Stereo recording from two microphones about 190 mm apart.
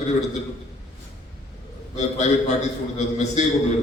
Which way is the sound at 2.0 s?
35° left (ahead or behind).